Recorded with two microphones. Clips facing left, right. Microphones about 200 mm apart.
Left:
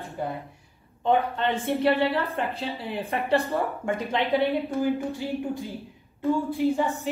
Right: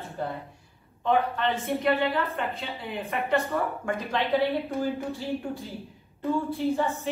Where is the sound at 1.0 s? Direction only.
30° left (ahead or behind).